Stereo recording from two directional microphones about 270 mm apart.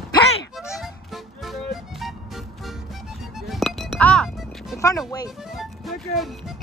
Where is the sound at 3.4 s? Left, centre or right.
Centre.